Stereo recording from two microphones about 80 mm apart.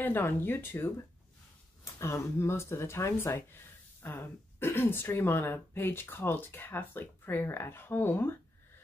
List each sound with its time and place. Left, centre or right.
0.0 s speech: left
2.0 s speech: left